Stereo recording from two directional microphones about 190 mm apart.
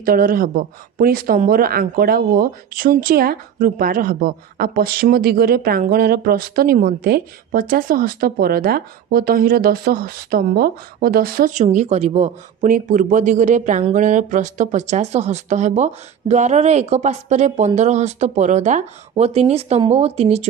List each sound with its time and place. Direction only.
0.0 s speech: 50° right (ahead or behind); by 20.4 s 35° right (ahead or behind)